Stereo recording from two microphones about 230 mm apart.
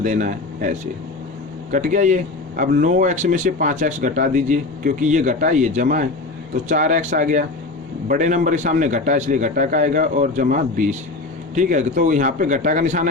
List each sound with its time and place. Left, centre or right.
0.0 s speech: right
1.7 s speech: right